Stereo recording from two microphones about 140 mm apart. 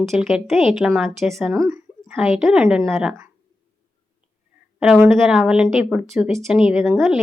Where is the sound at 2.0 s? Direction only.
5° right (ahead or behind).